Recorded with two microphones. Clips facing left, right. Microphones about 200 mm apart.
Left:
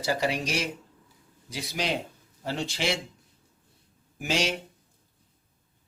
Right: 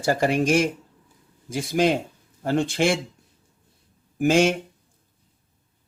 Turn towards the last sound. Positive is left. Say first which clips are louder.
# right 10 dB
turn(degrees=-50)  # may be behind; listen again after turning